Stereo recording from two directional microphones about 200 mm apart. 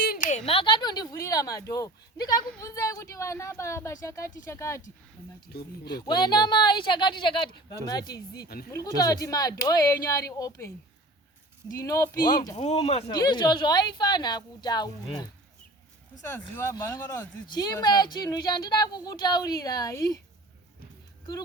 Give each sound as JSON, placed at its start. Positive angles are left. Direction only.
{"t": 0.0, "sound": "a sound", "side_deg": 45}
{"t": 2.6, "sound": "speech", "side_deg": 15}
{"t": 5.5, "sound": "speech", "side_deg": 50}
{"t": 5.8, "sound": "speech", "side_deg": 20}
{"t": 8.5, "sound": "speech", "side_deg": 50}
{"t": 9.0, "sound": "speech", "side_deg": 20}
{"t": 11.8, "sound": "speech", "side_deg": 15}
{"t": 12.5, "sound": "speech", "side_deg": 35}
{"t": 16.6, "sound": "speech", "side_deg": 15}